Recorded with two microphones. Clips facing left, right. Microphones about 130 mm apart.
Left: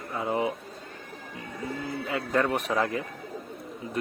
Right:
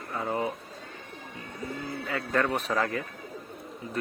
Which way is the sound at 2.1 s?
20° left (ahead or behind).